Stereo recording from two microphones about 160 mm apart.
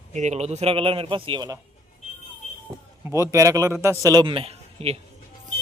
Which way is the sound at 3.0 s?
20° right (ahead or behind).